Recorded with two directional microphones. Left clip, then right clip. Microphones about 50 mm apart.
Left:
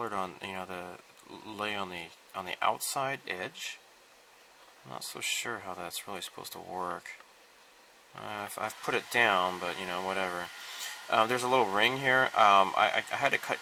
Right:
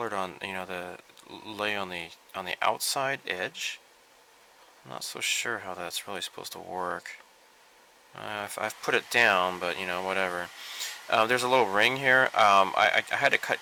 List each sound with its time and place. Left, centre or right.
0.0 s speech: right
4.9 s speech: right
5.5 s speech: right
6.4 s speech: right
6.7 s speech: right
8.2 s speech: right
8.4 s speech: right
12.0 s speech: right